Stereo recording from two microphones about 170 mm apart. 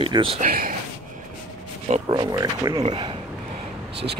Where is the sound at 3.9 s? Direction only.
85° right.